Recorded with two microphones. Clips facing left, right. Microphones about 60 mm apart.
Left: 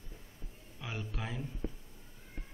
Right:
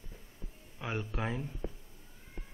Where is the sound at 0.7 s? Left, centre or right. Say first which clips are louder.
Right 5 dB; right.